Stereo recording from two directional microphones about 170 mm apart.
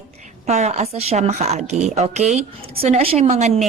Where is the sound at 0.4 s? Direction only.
40° right (ahead or behind).